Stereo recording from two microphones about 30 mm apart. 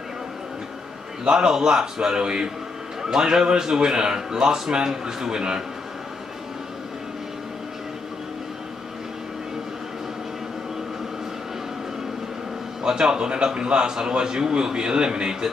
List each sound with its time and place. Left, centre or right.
1.2 s a man's voice: right
12.8 s a man's voice: right